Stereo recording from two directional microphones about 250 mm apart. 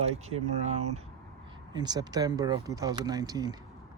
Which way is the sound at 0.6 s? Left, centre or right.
Right.